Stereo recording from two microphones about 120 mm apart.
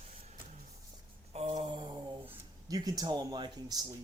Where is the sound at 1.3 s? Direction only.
60° right (ahead or behind); by 2.0 s 40° right (ahead or behind).